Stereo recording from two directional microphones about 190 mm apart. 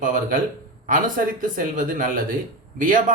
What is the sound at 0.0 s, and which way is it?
Speech, 45° right (ahead or behind).